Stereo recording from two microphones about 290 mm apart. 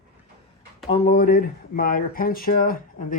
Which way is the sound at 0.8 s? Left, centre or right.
Left.